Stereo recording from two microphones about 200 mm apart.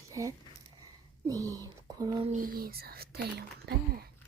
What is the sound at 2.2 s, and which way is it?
Speech, 40° right (ahead or behind).